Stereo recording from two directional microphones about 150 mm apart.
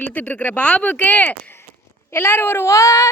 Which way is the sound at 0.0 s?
10° left (ahead or behind).